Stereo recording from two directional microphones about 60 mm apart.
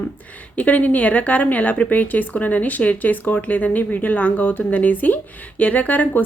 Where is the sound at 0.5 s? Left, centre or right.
Left.